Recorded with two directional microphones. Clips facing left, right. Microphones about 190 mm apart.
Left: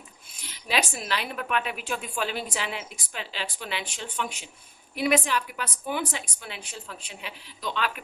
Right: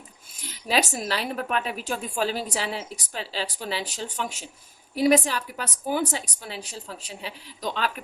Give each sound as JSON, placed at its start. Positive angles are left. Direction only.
{"t": 0.4, "sound": "a woman's voice", "side_deg": -40}